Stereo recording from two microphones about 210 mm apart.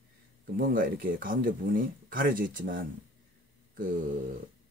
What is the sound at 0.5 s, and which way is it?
Speech, 40° right (ahead or behind).